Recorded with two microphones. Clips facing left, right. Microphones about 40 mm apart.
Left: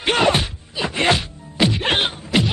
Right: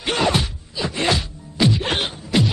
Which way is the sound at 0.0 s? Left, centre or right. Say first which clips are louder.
Left 3 dB; left.